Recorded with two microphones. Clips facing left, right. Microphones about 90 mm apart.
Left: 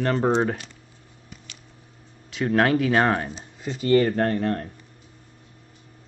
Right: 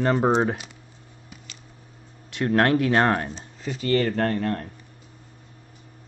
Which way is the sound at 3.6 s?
20° left (ahead or behind).